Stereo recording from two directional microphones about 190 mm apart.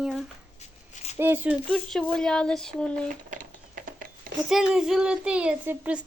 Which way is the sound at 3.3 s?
45° right (ahead or behind).